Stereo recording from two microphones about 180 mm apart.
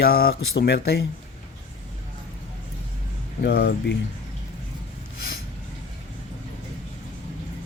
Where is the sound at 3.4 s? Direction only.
65° left (ahead or behind).